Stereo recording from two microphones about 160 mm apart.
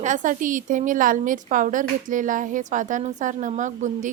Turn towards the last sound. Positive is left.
turn(degrees=-50)  # may be behind; listen again after turning